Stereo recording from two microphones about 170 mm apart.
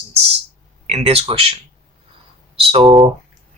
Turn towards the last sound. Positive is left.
turn(degrees=-30)  # may be behind; listen again after turning